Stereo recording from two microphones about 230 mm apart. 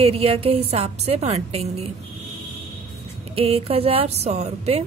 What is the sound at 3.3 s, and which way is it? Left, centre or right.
A woman's voice, right.